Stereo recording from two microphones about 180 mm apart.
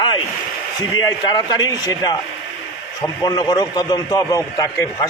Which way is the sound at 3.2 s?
20° left (ahead or behind).